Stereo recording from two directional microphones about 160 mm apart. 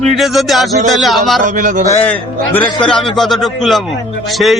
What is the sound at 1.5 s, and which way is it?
Speech, 55° right (ahead or behind).